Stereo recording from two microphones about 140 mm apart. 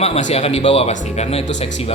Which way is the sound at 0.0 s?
50° left (ahead or behind).